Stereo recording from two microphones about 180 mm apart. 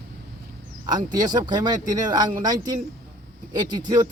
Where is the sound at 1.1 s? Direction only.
25° right (ahead or behind).